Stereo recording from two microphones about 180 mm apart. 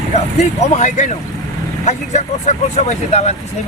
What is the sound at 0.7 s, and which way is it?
Speech, 40° left (ahead or behind).